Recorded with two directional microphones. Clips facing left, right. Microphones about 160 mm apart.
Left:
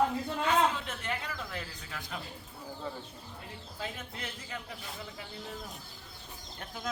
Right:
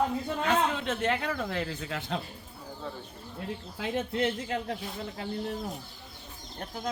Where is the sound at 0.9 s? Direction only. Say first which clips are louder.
Right 9 dB; 85° right.